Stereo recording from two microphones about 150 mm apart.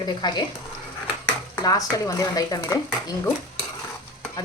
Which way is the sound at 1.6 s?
25° left (ahead or behind).